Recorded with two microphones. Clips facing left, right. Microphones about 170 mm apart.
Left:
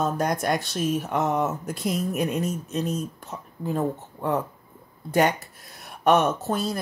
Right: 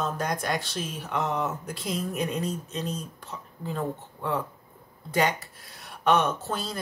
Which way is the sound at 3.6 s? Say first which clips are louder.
Left 5 dB; 45° left (ahead or behind).